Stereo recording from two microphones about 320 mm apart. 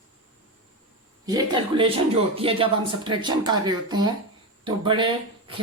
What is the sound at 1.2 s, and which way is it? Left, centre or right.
Speech, centre.